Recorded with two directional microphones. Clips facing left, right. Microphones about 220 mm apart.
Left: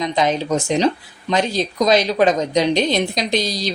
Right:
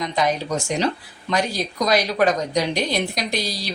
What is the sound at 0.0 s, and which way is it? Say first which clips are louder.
Speech: left 3 dB; 20° left (ahead or behind).